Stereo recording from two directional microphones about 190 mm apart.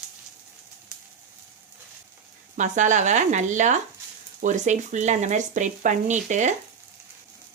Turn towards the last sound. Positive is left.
turn(degrees=-40)  # may be behind; listen again after turning